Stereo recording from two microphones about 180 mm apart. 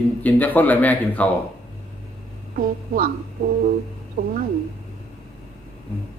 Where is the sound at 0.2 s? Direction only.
10° left (ahead or behind).